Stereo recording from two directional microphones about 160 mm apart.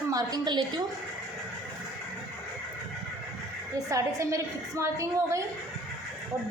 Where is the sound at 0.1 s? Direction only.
20° right (ahead or behind).